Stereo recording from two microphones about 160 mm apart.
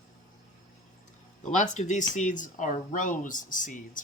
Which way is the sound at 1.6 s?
50° left (ahead or behind).